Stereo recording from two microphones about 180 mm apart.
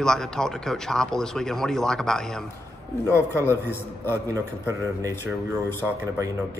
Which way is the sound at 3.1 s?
15° left (ahead or behind).